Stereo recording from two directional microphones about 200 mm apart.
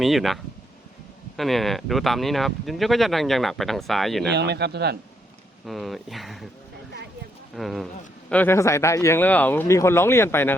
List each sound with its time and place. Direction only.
0.0 s speech: centre (ahead or behind)
1.4 s speech: centre (ahead or behind)
4.3 s speech: 55° right (ahead or behind)
5.6 s speech: centre (ahead or behind)
7.5 s speech: centre (ahead or behind)